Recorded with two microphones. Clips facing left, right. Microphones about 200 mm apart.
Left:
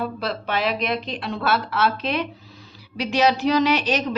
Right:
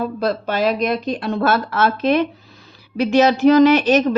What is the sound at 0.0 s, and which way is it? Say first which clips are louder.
A woman's voice: right 6 dB; 40° right (ahead or behind).